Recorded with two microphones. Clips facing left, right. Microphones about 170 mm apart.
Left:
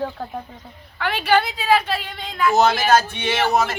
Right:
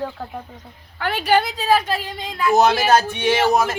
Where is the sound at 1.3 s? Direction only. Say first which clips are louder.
Even; 40° right (ahead or behind).